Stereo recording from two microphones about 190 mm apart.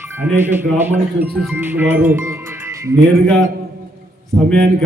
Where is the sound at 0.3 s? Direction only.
10° right (ahead or behind).